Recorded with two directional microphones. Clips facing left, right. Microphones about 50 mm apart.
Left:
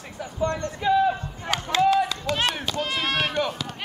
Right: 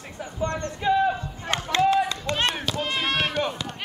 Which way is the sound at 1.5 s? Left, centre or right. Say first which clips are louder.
Left 1 dB; right.